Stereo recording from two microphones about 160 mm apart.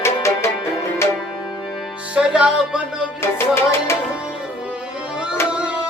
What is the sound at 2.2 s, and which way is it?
Music, 5° right (ahead or behind).